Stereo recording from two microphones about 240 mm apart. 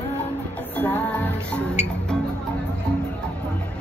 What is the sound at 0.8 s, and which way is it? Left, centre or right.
Music, centre.